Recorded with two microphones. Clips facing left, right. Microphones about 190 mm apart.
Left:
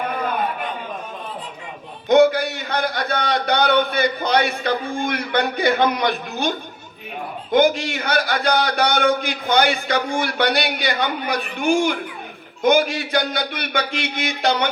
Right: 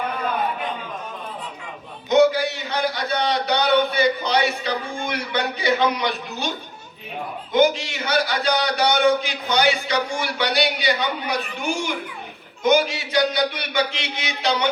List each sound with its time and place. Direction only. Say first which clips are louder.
2.0 s a man's voice: left 2 dB; 55° left (ahead or behind)
7.5 s a man's voice: left 2 dB; 55° left (ahead or behind)